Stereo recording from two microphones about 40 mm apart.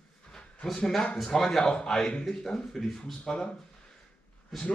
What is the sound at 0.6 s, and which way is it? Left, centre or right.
Speech, centre.